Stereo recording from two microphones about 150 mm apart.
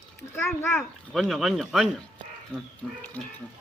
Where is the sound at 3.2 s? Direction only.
10° left (ahead or behind).